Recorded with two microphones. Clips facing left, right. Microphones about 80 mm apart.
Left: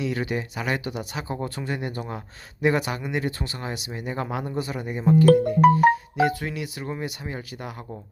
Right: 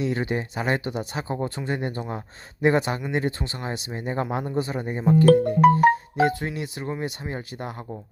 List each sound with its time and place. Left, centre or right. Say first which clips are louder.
0.0 s speech: right 1 dB; right